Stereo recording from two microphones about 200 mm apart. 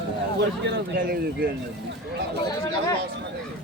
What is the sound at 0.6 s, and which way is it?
Speech, 55° right (ahead or behind).